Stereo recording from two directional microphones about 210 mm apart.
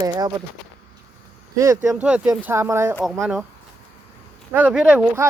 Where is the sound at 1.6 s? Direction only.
15° right (ahead or behind).